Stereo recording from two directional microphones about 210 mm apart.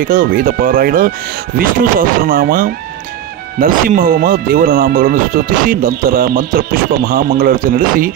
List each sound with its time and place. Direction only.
0.0 s speech: 45° right (ahead or behind)